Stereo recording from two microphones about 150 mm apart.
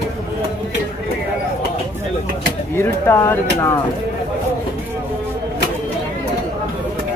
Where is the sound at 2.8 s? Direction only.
15° left (ahead or behind).